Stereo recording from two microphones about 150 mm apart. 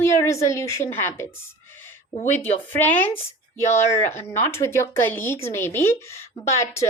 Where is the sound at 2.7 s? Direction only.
15° left (ahead or behind).